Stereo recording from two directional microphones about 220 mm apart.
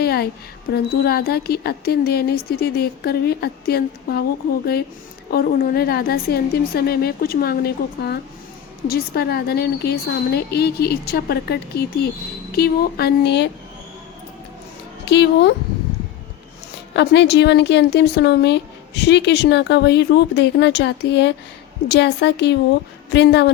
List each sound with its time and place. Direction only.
0.0 s a sound: 45° left (ahead or behind)
0.7 s a woman's voice: 45° left (ahead or behind)
5.3 s a woman's voice: 45° left (ahead or behind)
15.0 s a woman's voice: 50° left (ahead or behind)
16.9 s a woman's voice: 50° left (ahead or behind)